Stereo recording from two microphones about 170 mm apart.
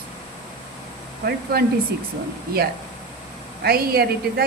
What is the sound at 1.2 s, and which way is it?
Speech, 60° right (ahead or behind).